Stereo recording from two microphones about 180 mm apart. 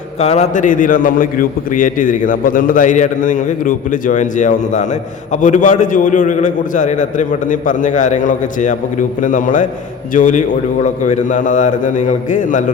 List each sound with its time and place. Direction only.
0.2 s a man's voice: 35° left (ahead or behind)